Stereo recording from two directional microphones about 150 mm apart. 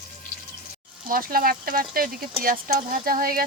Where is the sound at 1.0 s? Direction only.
70° right (ahead or behind).